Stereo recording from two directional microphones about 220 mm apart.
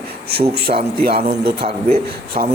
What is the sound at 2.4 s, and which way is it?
Speech, 30° right (ahead or behind).